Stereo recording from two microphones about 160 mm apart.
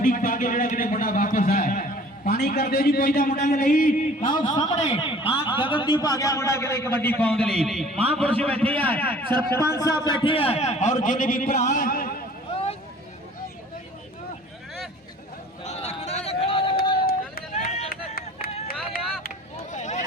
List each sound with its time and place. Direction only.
0.0 s a man's voice: 55° left (ahead or behind)
4.3 s a man's voice: 25° left (ahead or behind)
4.7 s a man's voice: 40° left (ahead or behind); by 11.5 s 60° left (ahead or behind)
11.5 s speech: 50° left (ahead or behind)
15.6 s a sound: 45° left (ahead or behind)
17.6 s run: 45° left (ahead or behind)
19.7 s a sound: 50° left (ahead or behind)